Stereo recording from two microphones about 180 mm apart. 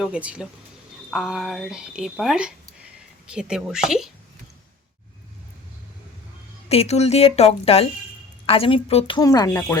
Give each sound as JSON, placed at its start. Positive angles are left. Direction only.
{"t": 0.0, "sound": "speech", "side_deg": -5}
{"t": 6.7, "sound": "a woman's voice", "side_deg": 35}